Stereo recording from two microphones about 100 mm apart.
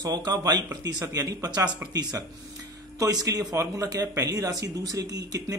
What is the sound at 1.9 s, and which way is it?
Speech, 40° right (ahead or behind).